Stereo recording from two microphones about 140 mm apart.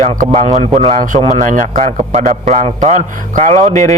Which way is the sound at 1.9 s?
55° right (ahead or behind).